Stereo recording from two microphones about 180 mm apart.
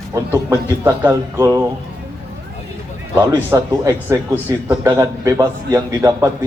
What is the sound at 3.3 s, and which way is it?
A man's voice, 15° right (ahead or behind).